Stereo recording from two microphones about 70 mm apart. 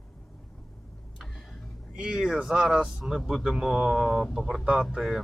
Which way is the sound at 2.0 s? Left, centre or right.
Centre.